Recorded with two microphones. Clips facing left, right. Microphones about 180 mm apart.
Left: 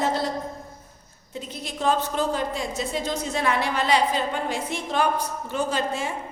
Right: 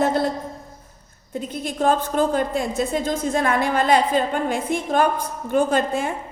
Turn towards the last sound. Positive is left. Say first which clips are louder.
# right 5 dB
turn(degrees=-55)  # may be behind; listen again after turning